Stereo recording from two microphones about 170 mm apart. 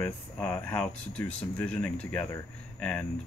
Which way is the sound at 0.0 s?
10° left (ahead or behind).